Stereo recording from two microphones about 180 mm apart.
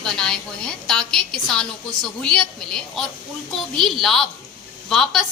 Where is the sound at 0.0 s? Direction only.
5° left (ahead or behind).